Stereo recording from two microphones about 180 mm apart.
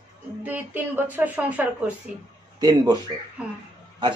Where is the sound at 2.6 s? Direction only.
20° right (ahead or behind).